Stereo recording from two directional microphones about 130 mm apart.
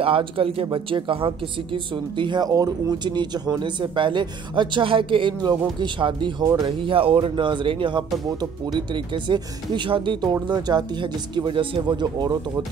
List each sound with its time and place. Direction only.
0.0 s speech: 45° right (ahead or behind)
6.4 s speech: 25° right (ahead or behind)
6.8 s speech: 45° right (ahead or behind)